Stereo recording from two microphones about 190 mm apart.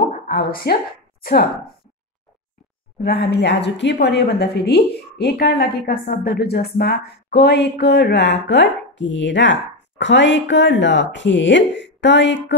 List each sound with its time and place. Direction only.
0.3 s a woman's voice: 55° left (ahead or behind)
3.0 s a woman's voice: 55° left (ahead or behind)